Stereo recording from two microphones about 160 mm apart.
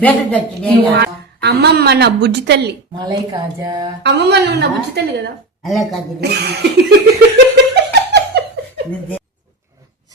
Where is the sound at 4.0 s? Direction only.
90° right.